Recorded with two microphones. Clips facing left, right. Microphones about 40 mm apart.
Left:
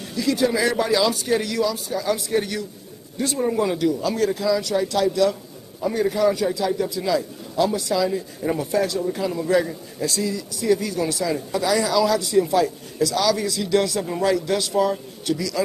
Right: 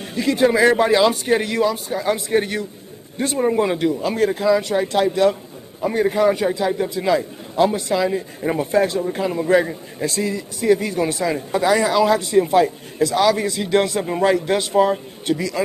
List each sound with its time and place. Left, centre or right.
0.0 s speech: right